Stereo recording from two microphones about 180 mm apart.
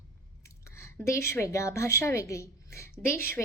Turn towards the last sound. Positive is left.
turn(degrees=15)  # may be behind; listen again after turning